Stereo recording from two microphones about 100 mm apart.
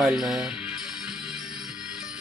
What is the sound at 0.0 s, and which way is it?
Music, centre (ahead or behind).